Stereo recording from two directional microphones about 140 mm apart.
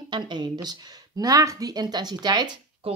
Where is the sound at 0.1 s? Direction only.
30° right (ahead or behind).